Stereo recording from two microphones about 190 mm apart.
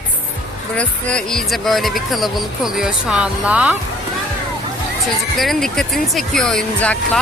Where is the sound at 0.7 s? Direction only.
5° left (ahead or behind).